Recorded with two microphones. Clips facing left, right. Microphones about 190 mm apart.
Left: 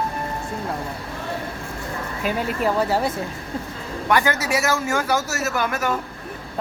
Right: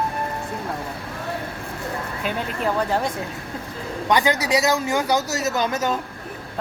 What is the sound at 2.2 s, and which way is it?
Speech, 5° left (ahead or behind).